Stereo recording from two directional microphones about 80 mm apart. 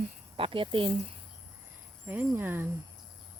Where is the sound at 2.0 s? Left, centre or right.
Right.